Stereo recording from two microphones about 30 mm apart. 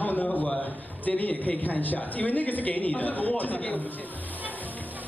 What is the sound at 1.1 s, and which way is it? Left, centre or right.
Speech, left.